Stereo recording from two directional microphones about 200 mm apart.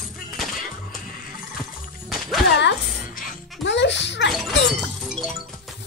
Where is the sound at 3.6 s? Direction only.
60° left (ahead or behind).